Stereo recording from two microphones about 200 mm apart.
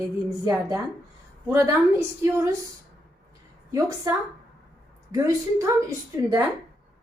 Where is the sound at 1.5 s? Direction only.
15° right (ahead or behind).